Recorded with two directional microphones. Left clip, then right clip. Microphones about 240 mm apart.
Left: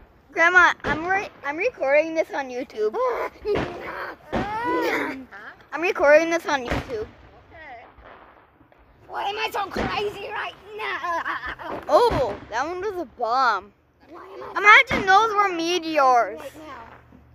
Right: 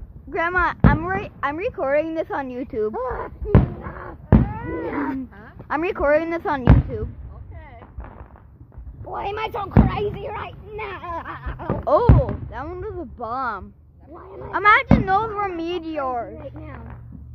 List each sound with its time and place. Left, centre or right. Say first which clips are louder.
0.3 s speech: left 5 dB; centre
3.9 s a sound: right 4 dB; left
5.7 s speech: left 2 dB; centre
7.5 s artillery fire: left 5 dB; right
9.1 s speech: even; right
11.9 s speech: left 1 dB; centre
14.1 s speech: even; right
14.6 s speech: left 2 dB; centre